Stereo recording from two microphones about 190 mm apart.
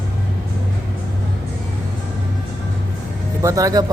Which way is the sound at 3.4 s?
20° right (ahead or behind).